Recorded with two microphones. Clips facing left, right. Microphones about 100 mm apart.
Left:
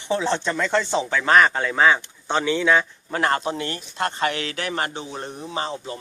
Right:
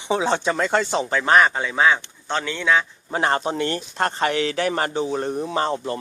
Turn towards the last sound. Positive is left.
turn(degrees=-50)  # may be behind; listen again after turning